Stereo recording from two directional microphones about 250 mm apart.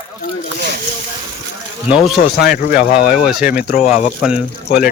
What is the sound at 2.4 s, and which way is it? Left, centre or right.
Speech, left.